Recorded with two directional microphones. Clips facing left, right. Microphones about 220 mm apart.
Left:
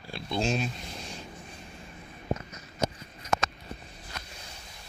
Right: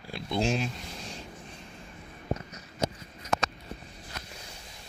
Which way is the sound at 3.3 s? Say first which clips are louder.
Even; 35° right (ahead or behind).